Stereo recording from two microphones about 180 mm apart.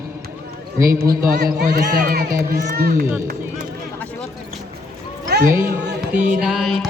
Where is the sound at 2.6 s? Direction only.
50° right (ahead or behind).